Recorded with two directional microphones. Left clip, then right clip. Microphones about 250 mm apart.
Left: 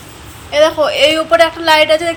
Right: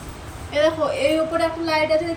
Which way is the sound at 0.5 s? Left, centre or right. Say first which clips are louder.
Left 8 dB; centre.